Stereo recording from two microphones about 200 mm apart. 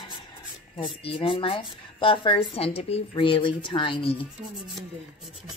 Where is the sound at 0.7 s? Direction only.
25° left (ahead or behind).